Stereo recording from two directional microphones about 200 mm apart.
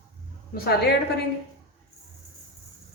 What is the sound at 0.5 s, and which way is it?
Speech, 50° left (ahead or behind).